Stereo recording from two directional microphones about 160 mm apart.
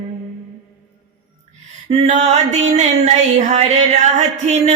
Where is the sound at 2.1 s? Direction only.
45° right (ahead or behind).